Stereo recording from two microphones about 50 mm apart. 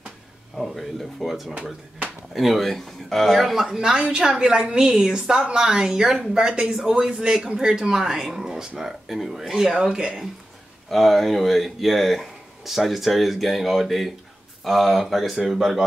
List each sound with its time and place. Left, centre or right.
0.6 s speech: centre
1.5 s speech: right
2.3 s speech: centre
3.6 s a woman's voice: centre
10.9 s speech: centre